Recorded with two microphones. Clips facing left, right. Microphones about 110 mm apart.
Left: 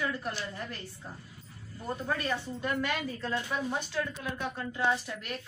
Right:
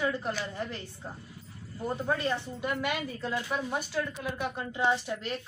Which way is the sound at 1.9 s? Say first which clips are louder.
Right 2 dB; 20° right (ahead or behind).